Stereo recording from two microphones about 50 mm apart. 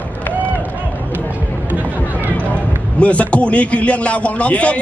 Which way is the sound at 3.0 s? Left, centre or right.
Left.